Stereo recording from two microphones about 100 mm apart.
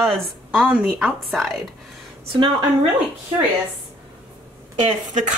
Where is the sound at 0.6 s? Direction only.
10° right (ahead or behind).